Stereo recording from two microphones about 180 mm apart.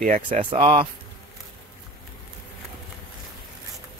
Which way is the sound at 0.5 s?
30° right (ahead or behind).